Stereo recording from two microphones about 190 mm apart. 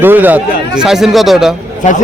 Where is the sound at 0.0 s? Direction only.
10° right (ahead or behind).